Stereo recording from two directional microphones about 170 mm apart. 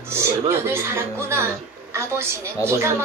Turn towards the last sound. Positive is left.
turn(degrees=-15)  # may be behind; listen again after turning